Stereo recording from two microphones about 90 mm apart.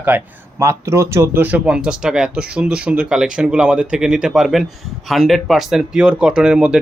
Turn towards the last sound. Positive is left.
turn(degrees=-10)  # may be behind; listen again after turning